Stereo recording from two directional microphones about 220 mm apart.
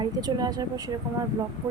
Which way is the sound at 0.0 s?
20° right (ahead or behind).